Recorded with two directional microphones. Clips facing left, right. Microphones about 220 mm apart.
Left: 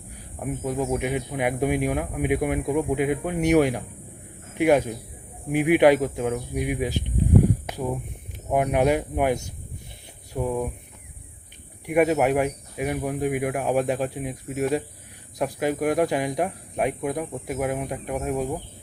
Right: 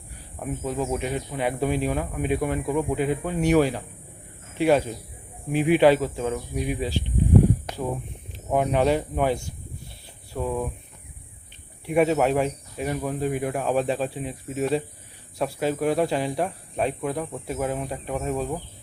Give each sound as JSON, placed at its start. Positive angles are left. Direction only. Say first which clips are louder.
{"t": 0.3, "sound": "speech", "louder": "left 1 dB", "side_deg": 10}
{"t": 8.5, "sound": "speech", "louder": "even", "side_deg": 10}
{"t": 10.3, "sound": "speech", "louder": "left 1 dB", "side_deg": 15}
{"t": 11.9, "sound": "speech", "louder": "left 1 dB", "side_deg": 10}